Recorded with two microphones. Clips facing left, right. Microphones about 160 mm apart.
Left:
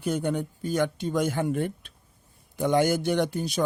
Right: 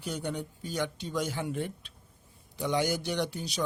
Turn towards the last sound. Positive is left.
turn(degrees=50)  # may be behind; listen again after turning